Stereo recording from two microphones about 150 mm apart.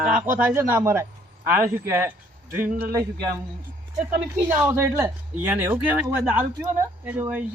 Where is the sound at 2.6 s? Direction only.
70° right (ahead or behind).